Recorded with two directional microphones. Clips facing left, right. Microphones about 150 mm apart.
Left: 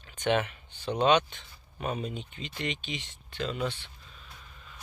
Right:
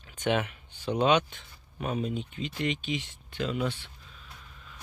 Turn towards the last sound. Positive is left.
turn(degrees=0)  # may be behind; listen again after turning